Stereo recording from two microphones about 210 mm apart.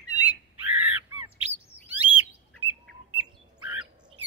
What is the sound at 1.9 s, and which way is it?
Bird, 10° right (ahead or behind).